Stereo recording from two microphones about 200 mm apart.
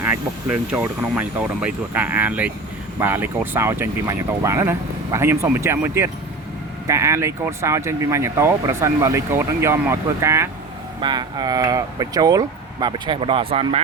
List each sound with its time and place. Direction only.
0.0 s speech: 10° right (ahead or behind); by 13.8 s 30° right (ahead or behind)